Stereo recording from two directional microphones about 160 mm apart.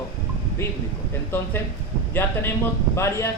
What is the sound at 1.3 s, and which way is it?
A man's voice, 15° left (ahead or behind).